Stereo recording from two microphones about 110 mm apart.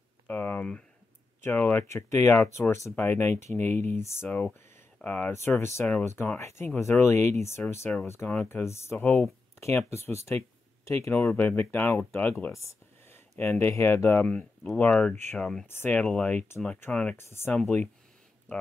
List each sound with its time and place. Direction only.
0.3 s speech: 20° left (ahead or behind)
15.6 s speech: 20° left (ahead or behind)